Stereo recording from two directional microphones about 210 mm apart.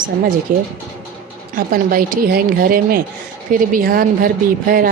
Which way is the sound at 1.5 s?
45° right (ahead or behind).